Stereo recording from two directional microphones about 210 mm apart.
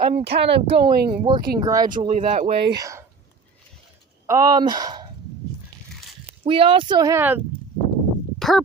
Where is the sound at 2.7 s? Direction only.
15° right (ahead or behind).